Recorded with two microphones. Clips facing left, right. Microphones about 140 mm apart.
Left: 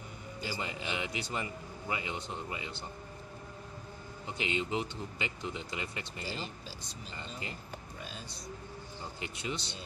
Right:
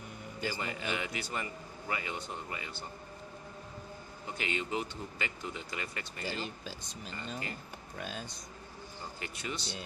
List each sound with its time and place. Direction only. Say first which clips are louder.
0.5 s a man's voice: right 1 dB; 20° left (ahead or behind)
4.3 s a man's voice: left 2 dB; 20° left (ahead or behind)
9.2 s a man's voice: left 2 dB; 20° left (ahead or behind)